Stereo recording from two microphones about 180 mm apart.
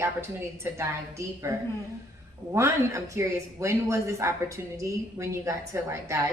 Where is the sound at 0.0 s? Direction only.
15° right (ahead or behind).